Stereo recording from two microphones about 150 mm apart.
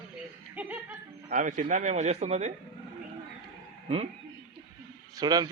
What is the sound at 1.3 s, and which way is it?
A man's voice, 60° right (ahead or behind).